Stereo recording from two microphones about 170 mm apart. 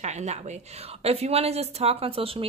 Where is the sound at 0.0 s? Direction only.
40° right (ahead or behind).